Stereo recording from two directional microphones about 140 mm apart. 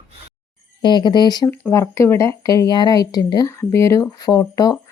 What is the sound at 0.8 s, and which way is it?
Speech, 30° left (ahead or behind).